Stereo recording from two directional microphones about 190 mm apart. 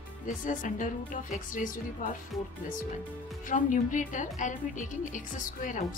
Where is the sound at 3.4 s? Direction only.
45° left (ahead or behind).